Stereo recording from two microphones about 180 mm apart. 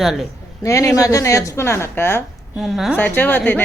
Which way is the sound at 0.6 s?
20° left (ahead or behind).